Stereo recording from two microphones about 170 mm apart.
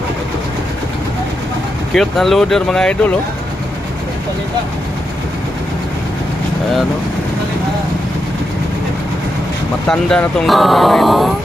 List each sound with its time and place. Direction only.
1.9 s speech: centre (ahead or behind)
9.9 s speech: 5° left (ahead or behind)